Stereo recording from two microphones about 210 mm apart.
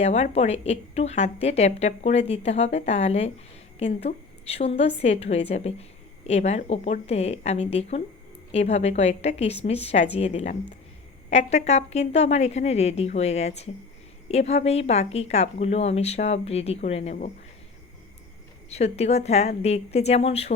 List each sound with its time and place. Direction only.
0.0 s a woman's voice: 30° left (ahead or behind)
18.7 s a woman's voice: 30° left (ahead or behind)